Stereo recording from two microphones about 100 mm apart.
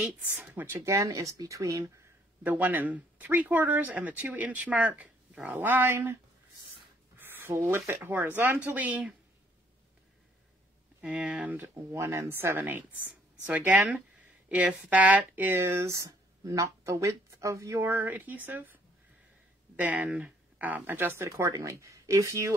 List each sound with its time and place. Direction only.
0.0 s speech: 15° right (ahead or behind); by 1.9 s 35° right (ahead or behind)
2.4 s speech: 20° right (ahead or behind)
7.2 s speech: 20° right (ahead or behind)
11.0 s speech: 10° right (ahead or behind)
11.6 s speech: 25° right (ahead or behind)
17.8 s speech: 20° right (ahead or behind)
19.8 s speech: 15° right (ahead or behind); by 22.5 s 30° right (ahead or behind)